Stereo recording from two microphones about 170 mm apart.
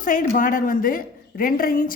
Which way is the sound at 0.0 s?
50° left (ahead or behind).